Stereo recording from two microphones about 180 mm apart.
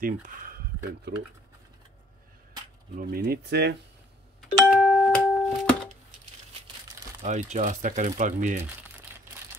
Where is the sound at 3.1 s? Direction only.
60° right (ahead or behind).